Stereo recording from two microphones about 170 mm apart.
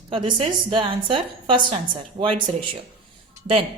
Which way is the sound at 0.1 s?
30° right (ahead or behind).